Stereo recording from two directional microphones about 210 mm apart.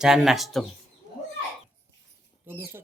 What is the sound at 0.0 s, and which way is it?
Speech, centre (ahead or behind).